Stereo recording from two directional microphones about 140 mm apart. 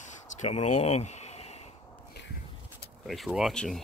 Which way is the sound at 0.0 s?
55° left (ahead or behind).